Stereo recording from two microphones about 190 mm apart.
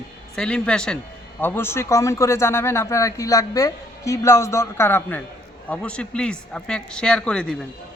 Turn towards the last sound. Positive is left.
turn(degrees=5)  # may be behind; listen again after turning